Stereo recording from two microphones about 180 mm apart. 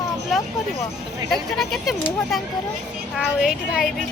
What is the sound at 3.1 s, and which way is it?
Speech, centre (ahead or behind).